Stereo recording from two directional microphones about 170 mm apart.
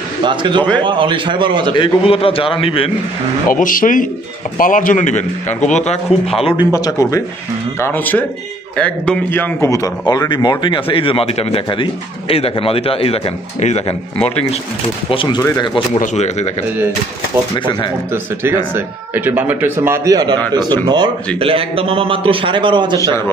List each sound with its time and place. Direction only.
0.2 s a man's voice: 30° right (ahead or behind)
1.8 s a man's voice: 35° left (ahead or behind)
3.4 s a man's voice: 55° left (ahead or behind)
15.0 s speech: 30° left (ahead or behind)
16.0 s a man's voice: 40° left (ahead or behind)
18.8 s a man's voice: 10° right (ahead or behind); by 22.9 s 30° right (ahead or behind)